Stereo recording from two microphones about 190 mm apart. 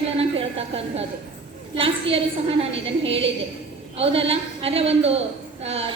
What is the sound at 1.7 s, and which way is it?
Speech, 30° right (ahead or behind).